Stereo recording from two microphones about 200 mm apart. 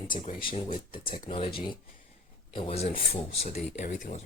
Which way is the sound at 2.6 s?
30° left (ahead or behind).